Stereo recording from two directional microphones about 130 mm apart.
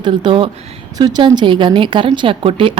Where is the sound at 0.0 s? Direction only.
35° right (ahead or behind).